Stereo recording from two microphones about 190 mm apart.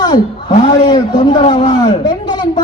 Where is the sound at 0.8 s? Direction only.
20° left (ahead or behind).